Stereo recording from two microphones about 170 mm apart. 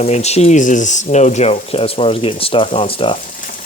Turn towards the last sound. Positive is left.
turn(degrees=30)  # may be behind; listen again after turning